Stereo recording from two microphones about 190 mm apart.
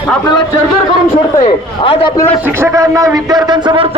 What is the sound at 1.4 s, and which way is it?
Speech, 25° left (ahead or behind).